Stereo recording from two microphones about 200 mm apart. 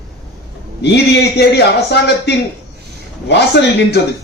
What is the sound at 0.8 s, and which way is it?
A man's voice, 60° left (ahead or behind).